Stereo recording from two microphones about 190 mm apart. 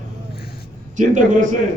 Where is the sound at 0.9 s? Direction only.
40° right (ahead or behind).